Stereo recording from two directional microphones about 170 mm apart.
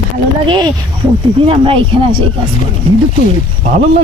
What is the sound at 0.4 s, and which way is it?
Speech, 30° right (ahead or behind).